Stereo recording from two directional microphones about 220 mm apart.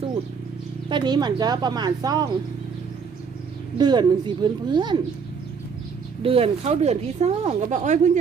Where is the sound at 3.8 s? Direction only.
20° right (ahead or behind).